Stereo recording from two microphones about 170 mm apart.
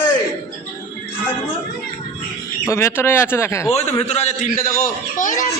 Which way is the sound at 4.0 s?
40° left (ahead or behind).